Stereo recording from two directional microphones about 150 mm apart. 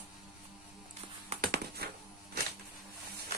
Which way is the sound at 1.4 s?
90° right.